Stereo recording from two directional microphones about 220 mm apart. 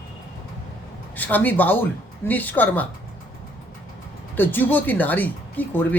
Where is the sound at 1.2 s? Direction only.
10° left (ahead or behind).